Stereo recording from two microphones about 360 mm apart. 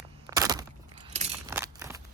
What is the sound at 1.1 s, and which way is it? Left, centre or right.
Scissors, centre.